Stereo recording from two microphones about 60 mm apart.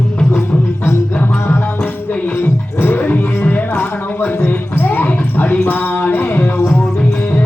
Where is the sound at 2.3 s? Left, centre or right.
Left.